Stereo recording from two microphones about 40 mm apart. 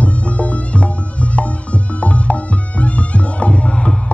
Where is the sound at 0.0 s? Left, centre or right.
Left.